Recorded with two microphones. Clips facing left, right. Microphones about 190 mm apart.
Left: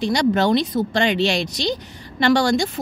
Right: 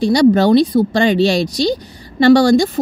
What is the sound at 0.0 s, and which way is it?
Speech, 35° right (ahead or behind).